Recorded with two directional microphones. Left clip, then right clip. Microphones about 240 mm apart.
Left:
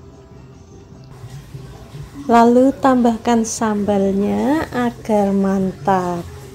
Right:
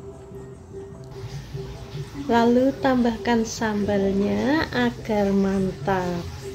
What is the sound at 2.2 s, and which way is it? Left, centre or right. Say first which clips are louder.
A woman's voice: left 7 dB; left.